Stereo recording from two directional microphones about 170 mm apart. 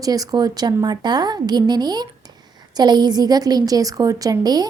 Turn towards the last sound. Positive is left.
turn(degrees=-25)  # may be behind; listen again after turning